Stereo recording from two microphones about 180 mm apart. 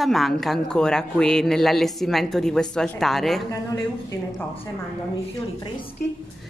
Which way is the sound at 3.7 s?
15° left (ahead or behind).